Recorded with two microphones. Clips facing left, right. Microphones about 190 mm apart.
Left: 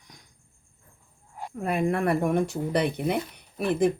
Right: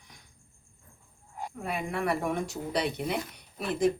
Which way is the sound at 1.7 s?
50° left (ahead or behind).